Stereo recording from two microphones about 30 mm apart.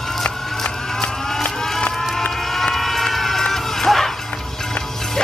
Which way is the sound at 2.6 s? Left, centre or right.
Centre.